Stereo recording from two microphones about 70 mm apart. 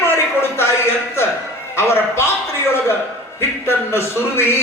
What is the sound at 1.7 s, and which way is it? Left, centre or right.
Speech, left.